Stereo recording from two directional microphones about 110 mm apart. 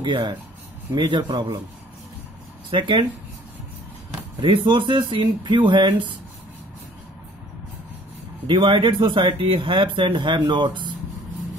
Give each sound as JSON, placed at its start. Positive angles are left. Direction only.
{"t": 0.0, "sound": "a man's voice", "side_deg": -45}
{"t": 2.7, "sound": "speech", "side_deg": -45}
{"t": 4.4, "sound": "speech", "side_deg": -50}
{"t": 8.5, "sound": "speech", "side_deg": -50}